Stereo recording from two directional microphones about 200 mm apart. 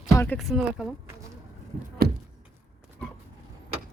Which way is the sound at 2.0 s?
50° right (ahead or behind).